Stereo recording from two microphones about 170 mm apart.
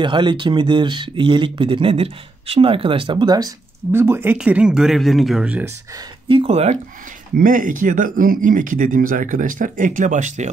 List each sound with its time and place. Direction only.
0.0 s speech: 25° right (ahead or behind); by 5.7 s 5° right (ahead or behind)
6.2 s speech: 30° right (ahead or behind)
7.3 s speech: 50° right (ahead or behind)